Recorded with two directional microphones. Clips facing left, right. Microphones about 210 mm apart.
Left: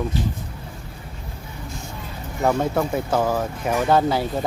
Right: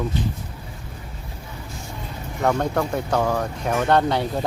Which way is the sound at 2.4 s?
5° left (ahead or behind).